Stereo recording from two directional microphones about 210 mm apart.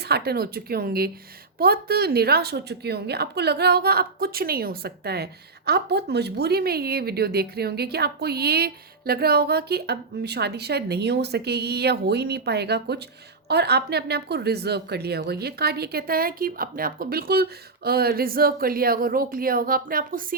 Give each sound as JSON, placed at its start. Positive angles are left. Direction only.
{"t": 0.0, "sound": "a woman's voice", "side_deg": -50}